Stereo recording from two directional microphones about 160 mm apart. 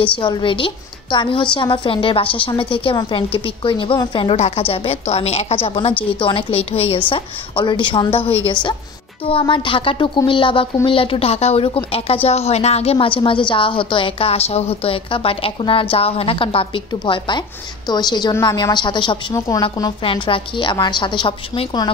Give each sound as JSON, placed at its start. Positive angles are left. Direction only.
{"t": 0.2, "sound": "a woman's voice", "side_deg": 30}